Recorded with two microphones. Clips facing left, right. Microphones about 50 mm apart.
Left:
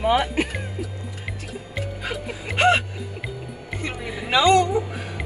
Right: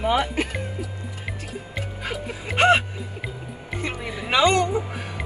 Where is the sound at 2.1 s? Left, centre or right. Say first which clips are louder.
Even; centre.